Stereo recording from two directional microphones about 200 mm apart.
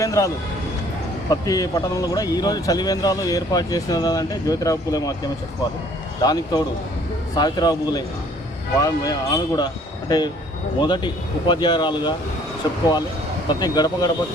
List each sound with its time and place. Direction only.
0.0 s speech: 15° left (ahead or behind)
1.3 s speech: 20° left (ahead or behind)
6.2 s speech: 20° left (ahead or behind)
13.5 s speech: 20° left (ahead or behind)